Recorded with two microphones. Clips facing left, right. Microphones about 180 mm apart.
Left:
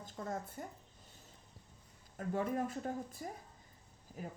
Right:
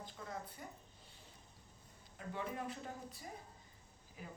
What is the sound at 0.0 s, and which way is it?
Speech, 45° left (ahead or behind).